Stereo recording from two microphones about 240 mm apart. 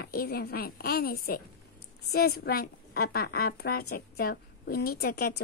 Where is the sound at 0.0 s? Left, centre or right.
Left.